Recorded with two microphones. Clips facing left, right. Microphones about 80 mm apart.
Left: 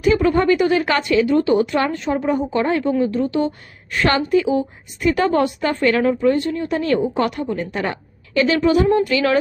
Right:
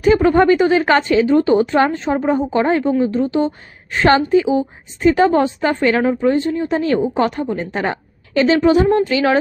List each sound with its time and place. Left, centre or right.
0.0 s a woman's voice: right